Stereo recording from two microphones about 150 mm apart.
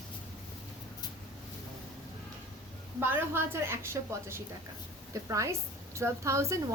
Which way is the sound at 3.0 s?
15° right (ahead or behind).